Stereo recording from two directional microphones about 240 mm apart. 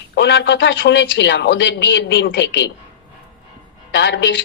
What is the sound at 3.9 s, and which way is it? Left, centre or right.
Speech, left.